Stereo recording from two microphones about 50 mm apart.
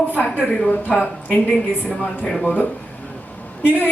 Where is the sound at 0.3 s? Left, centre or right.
Centre.